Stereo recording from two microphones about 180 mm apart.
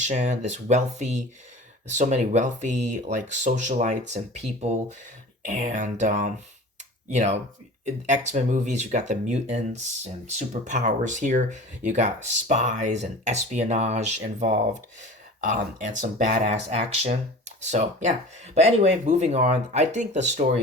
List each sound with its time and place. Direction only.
0.0 s speech: 40° right (ahead or behind)